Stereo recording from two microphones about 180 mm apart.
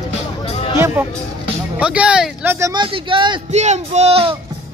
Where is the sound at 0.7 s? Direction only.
15° right (ahead or behind).